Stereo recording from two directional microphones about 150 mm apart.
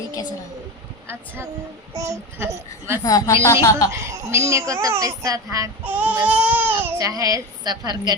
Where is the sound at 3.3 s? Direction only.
20° left (ahead or behind).